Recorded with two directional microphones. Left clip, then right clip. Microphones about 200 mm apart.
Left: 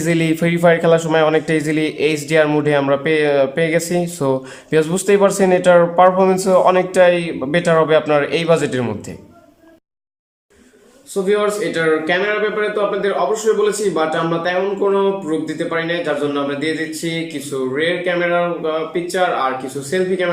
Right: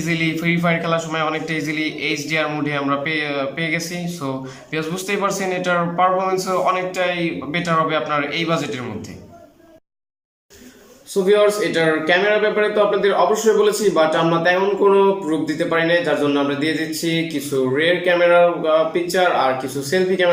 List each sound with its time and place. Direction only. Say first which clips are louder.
0.0 s a man's voice: left 4 dB; 35° left (ahead or behind)
11.1 s a man's voice: right 2 dB; centre (ahead or behind)